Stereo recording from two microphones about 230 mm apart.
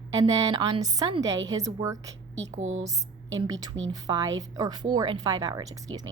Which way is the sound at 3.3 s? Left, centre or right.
Centre.